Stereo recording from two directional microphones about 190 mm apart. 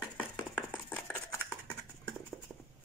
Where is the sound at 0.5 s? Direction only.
10° left (ahead or behind).